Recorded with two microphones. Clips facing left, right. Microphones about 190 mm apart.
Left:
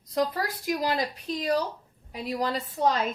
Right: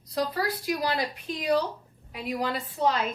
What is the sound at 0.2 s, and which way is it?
A woman's voice, 45° left (ahead or behind).